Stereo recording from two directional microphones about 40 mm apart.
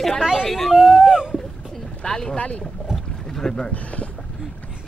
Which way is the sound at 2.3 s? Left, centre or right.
Left.